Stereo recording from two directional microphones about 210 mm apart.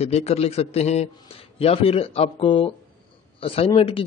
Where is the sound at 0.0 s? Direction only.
30° left (ahead or behind).